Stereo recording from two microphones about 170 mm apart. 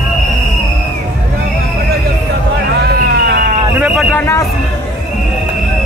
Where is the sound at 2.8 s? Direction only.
75° right (ahead or behind).